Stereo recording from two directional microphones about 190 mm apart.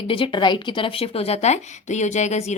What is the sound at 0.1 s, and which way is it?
Speech, 25° left (ahead or behind).